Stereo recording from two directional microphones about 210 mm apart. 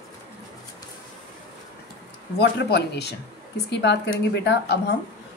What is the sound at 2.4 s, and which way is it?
A woman's voice, 50° left (ahead or behind).